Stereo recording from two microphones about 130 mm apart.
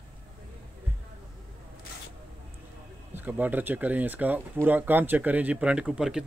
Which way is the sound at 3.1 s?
15° right (ahead or behind).